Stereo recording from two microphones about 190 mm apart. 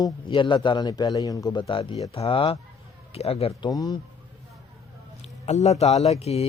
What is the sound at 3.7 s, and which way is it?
Speech, 20° left (ahead or behind).